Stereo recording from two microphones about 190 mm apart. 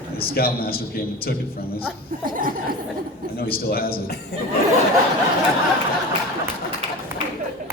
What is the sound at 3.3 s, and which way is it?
Speech, 50° left (ahead or behind).